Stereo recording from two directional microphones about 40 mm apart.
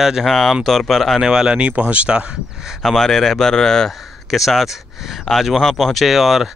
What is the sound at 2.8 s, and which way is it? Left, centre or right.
Speech, centre.